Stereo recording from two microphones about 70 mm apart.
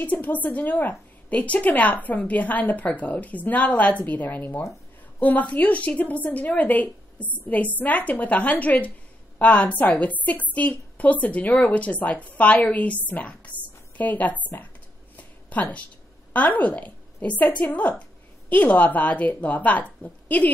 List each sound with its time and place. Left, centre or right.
0.0 s a woman's voice: left
15.1 s a sound: left
16.3 s a woman's voice: left